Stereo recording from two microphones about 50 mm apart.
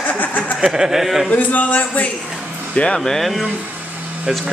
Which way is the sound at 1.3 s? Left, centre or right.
Left.